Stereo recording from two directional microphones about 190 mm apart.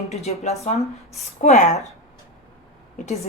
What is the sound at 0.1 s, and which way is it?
A woman's voice, 35° left (ahead or behind).